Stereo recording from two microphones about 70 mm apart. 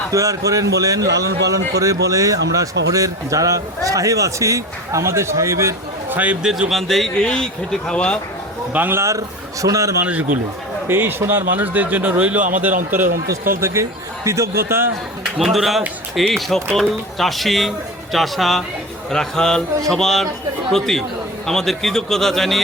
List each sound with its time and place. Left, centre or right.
0.1 s a man's voice: right
6.1 s a man's voice: right
6.4 s a man's voice: centre
8.7 s a man's voice: right
9.0 s a man's voice: right
10.0 s a man's voice: right
10.8 s a man's voice: right
13.3 s a man's voice: right
15.4 s a man's voice: centre